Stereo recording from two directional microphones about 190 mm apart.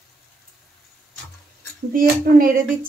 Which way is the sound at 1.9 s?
45° right (ahead or behind).